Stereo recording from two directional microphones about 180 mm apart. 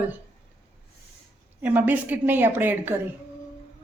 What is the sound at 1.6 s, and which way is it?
A woman's voice, 10° right (ahead or behind).